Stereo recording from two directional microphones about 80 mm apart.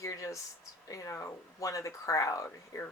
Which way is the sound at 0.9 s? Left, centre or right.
Left.